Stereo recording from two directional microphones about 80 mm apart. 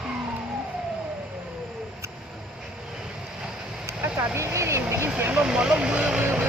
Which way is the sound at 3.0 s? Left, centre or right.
Centre.